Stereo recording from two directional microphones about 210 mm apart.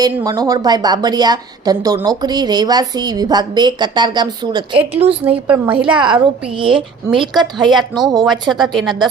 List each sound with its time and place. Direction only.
0.0 s a woman's voice: 15° right (ahead or behind)
5.5 s a woman's voice: 5° right (ahead or behind)
6.0 s a woman's voice: 20° right (ahead or behind)
7.1 s a woman's voice: centre (ahead or behind)